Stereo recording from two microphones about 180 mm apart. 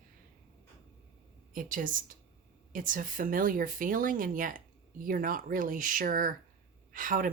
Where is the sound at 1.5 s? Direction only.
50° right (ahead or behind).